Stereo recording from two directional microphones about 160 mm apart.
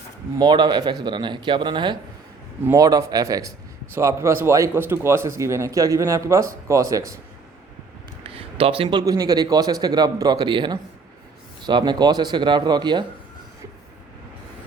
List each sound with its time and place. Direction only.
0.3 s a man's voice: 30° right (ahead or behind)
8.3 s a man's voice: 35° right (ahead or behind)